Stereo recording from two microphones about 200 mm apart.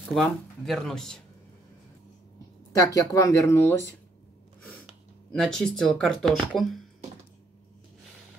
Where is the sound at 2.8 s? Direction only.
15° left (ahead or behind).